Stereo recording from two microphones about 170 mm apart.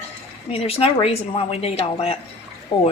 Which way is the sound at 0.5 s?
35° left (ahead or behind).